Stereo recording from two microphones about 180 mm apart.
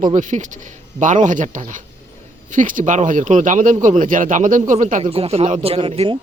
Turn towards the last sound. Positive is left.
turn(degrees=-30)  # may be behind; listen again after turning